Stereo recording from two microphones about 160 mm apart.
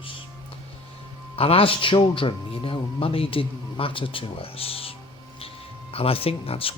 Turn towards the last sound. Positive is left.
turn(degrees=35)  # may be behind; listen again after turning